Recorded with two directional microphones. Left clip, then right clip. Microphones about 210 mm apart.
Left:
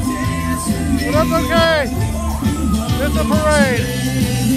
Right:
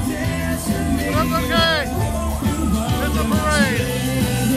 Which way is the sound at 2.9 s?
15° right (ahead or behind).